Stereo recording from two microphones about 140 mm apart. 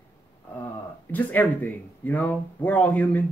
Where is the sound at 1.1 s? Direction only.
10° left (ahead or behind).